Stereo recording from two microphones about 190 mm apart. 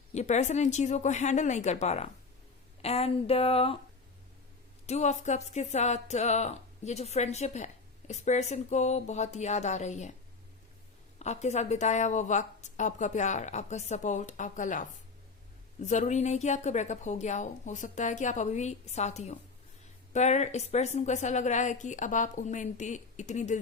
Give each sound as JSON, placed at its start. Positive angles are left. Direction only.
{"t": 0.1, "sound": "speech", "side_deg": 40}
{"t": 4.9, "sound": "speech", "side_deg": 35}
{"t": 11.2, "sound": "speech", "side_deg": 35}